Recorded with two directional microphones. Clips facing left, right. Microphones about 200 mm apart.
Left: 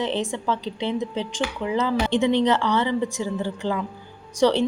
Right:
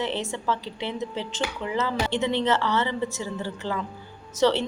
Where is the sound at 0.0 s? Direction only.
15° left (ahead or behind).